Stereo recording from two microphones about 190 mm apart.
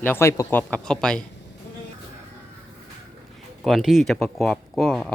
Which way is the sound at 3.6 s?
Centre (ahead or behind).